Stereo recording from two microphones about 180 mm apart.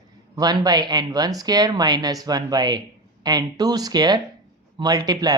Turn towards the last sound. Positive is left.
turn(degrees=-20)  # may be behind; listen again after turning